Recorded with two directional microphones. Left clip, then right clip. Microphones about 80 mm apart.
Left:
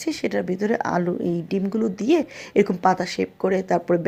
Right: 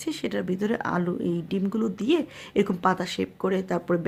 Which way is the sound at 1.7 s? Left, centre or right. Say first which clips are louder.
Left 5 dB; centre.